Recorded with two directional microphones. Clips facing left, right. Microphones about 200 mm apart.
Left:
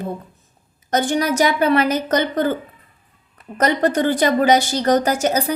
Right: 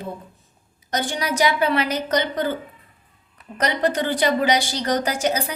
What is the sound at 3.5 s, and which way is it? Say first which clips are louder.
A woman's voice: left 4 dB; 45° left (ahead or behind).